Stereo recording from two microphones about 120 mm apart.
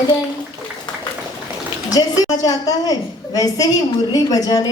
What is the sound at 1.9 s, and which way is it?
A woman's voice, 30° left (ahead or behind).